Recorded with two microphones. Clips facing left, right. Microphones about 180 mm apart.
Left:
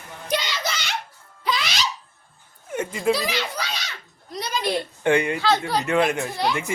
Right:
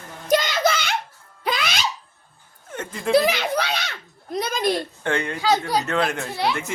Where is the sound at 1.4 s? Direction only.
55° right (ahead or behind).